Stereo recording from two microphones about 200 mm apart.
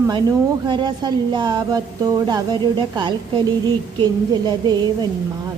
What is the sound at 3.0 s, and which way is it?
A woman's voice, 20° right (ahead or behind).